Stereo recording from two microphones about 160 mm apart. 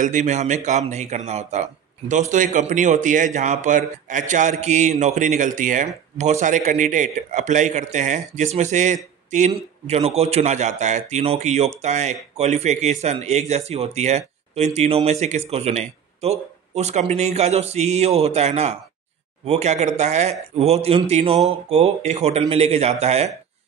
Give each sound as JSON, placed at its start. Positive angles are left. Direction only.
{"t": 0.0, "sound": "speech", "side_deg": -50}